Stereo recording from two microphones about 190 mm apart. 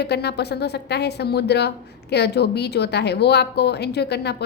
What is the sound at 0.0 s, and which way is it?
A woman's voice, 60° left (ahead or behind).